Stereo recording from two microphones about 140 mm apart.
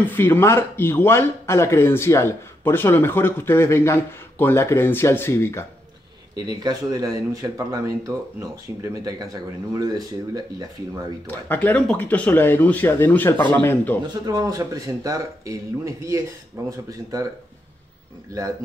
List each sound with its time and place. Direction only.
0.0 s speech: 15° left (ahead or behind)
6.3 s speech: 30° right (ahead or behind)
11.2 s speech: 15° left (ahead or behind)
14.0 s speech: 25° right (ahead or behind)